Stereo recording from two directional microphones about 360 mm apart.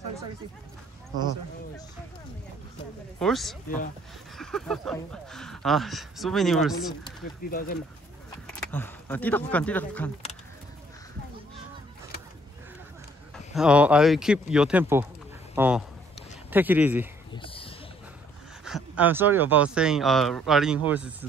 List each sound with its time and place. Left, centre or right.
3.2 s speech: centre
3.6 s speech: left
4.4 s speech: centre
7.4 s speech: left
8.5 s speech: centre
13.6 s speech: centre
17.3 s a sound: centre
18.6 s speech: centre